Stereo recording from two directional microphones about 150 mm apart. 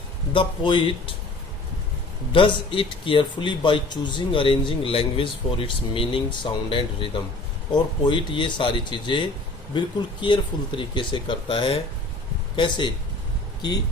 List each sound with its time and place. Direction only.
0.3 s a man's voice: 35° left (ahead or behind)
2.3 s a man's voice: 35° left (ahead or behind)